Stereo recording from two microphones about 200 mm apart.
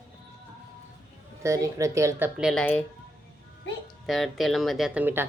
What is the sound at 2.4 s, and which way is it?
Speech, centre (ahead or behind).